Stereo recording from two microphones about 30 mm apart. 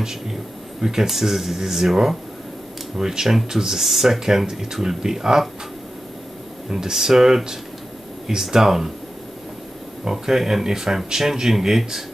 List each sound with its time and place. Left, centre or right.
0.0 s speech: centre
6.7 s speech: centre
10.0 s speech: centre